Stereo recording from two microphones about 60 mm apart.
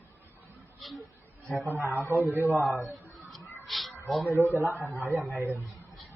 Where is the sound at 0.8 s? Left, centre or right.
Centre.